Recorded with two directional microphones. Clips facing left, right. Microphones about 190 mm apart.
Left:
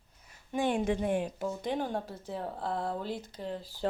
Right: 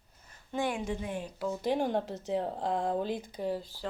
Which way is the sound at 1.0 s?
50° left (ahead or behind).